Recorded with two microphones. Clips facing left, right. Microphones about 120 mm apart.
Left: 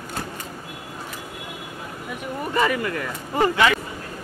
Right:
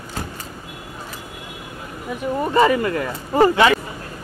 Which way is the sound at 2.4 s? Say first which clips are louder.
Right 6 dB; 30° right (ahead or behind).